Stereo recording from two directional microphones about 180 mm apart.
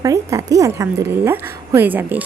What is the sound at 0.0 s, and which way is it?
A woman's voice, 20° right (ahead or behind).